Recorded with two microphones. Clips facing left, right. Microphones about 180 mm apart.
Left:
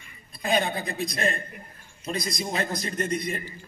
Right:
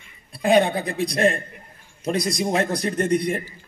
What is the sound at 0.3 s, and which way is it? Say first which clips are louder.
A man's voice: right 8 dB; 70° right (ahead or behind).